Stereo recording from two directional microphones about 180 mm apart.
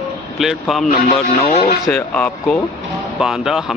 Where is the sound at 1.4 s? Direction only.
35° left (ahead or behind).